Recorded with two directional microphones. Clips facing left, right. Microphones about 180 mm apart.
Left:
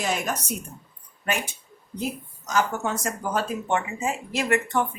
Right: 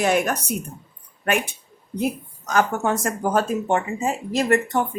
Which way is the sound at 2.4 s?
55° right (ahead or behind).